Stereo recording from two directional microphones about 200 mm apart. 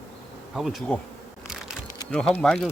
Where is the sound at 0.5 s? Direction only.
Centre (ahead or behind).